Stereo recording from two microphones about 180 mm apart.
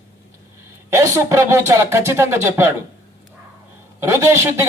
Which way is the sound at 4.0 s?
15° right (ahead or behind).